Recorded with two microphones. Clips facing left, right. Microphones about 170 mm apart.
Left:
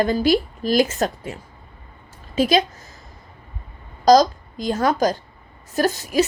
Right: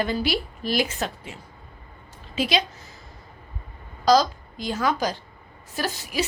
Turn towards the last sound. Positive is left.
turn(degrees=45)  # may be behind; listen again after turning